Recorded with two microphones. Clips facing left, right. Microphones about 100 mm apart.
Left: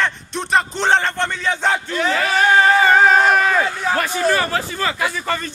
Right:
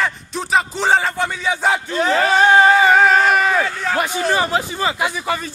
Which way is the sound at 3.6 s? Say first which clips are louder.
Left 1 dB; 10° left (ahead or behind).